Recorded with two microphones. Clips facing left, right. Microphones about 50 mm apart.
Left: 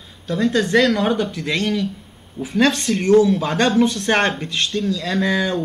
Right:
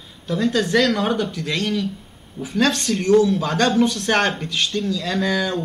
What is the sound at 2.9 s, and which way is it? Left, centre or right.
Speech, left.